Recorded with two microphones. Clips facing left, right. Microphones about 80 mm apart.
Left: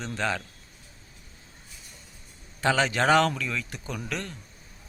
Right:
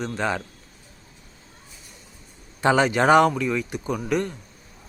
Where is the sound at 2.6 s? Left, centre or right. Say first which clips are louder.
Right 5 dB; centre.